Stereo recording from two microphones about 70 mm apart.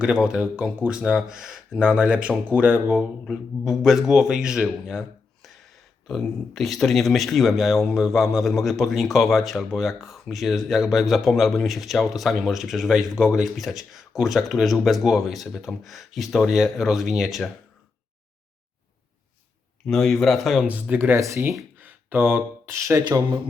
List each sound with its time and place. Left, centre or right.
0.0 s speech: centre
19.9 s speech: centre
20.9 s speech: right